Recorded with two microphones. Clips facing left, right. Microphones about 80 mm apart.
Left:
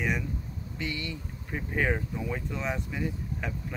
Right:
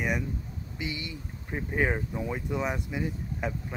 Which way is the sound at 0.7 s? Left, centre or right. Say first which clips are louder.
Left 1 dB; centre.